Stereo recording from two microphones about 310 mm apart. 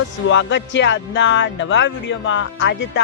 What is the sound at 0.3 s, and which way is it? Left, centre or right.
Speech, left.